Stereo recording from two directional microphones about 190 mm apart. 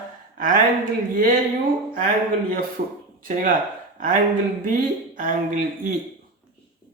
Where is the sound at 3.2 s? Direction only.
45° right (ahead or behind).